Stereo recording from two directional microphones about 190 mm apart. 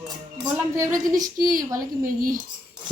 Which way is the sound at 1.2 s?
45° right (ahead or behind).